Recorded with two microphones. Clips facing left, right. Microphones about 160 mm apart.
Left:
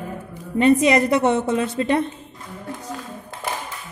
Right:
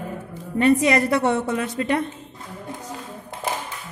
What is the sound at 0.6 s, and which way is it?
A woman's voice, 20° left (ahead or behind).